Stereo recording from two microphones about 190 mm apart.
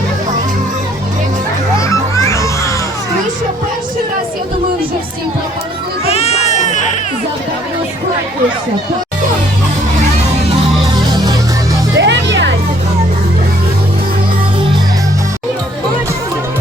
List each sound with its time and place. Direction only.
1.8 s music: 15° left (ahead or behind)
6.1 s crowd: 35° left (ahead or behind)
11.1 s music: 20° right (ahead or behind)
11.9 s music: 70° right (ahead or behind)